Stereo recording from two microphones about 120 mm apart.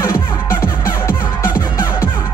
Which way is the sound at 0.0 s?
25° left (ahead or behind).